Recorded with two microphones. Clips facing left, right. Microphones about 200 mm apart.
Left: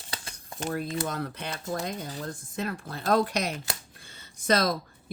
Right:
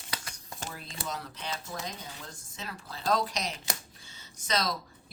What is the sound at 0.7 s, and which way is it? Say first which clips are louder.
Speech: left 10 dB; 55° left (ahead or behind).